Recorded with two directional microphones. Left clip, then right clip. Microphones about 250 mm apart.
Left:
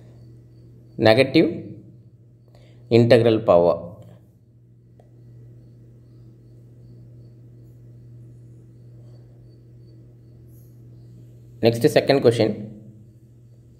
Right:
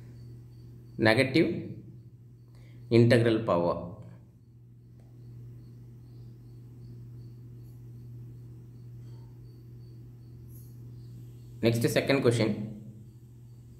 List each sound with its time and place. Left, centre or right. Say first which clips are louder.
0.9 s speech: left 9 dB; left
2.9 s speech: left 8 dB; left
11.6 s speech: left 10 dB; left